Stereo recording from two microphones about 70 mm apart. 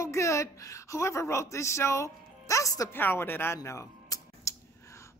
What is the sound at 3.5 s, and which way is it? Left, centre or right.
Speech, left.